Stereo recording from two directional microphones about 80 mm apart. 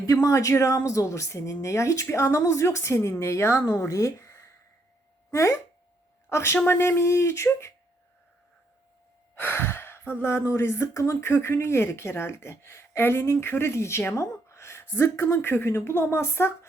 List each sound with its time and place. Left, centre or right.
0.0 s speech: left
9.3 s speech: left